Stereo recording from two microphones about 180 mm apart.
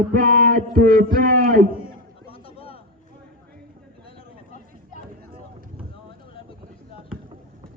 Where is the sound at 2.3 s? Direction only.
30° left (ahead or behind).